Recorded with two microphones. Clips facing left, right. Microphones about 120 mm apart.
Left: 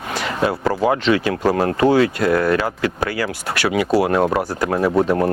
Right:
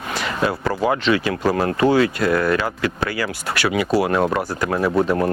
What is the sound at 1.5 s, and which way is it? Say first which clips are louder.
Speech: left 1 dB; 35° left (ahead or behind).